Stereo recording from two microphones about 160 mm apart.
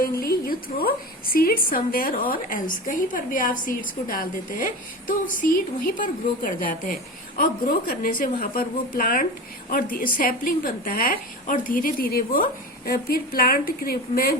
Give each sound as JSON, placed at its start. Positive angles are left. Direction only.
{"t": 0.0, "sound": "a woman's voice", "side_deg": 65}